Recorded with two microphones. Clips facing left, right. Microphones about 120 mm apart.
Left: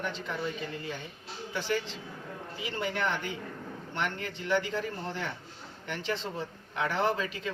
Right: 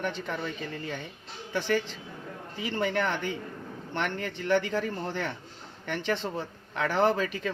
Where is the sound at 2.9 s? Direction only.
55° right (ahead or behind).